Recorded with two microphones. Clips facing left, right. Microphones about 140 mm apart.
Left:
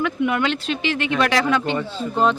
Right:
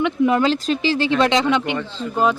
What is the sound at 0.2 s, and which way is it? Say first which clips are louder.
Speech: right 4 dB; 30° right (ahead or behind).